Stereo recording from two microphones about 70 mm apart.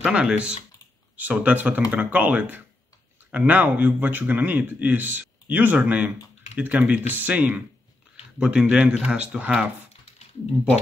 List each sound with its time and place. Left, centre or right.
0.0 s a man's voice: centre